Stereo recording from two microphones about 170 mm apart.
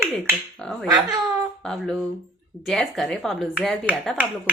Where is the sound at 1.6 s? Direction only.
5° left (ahead or behind).